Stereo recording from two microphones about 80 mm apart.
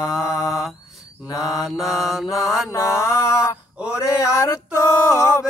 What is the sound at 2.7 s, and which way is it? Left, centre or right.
Music, left.